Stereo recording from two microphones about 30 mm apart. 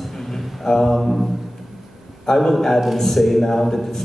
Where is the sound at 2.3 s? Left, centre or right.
Left.